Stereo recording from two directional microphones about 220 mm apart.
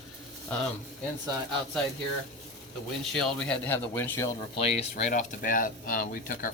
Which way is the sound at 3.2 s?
5° left (ahead or behind).